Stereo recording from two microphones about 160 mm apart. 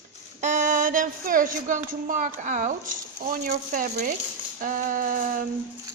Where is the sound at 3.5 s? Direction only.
50° right (ahead or behind).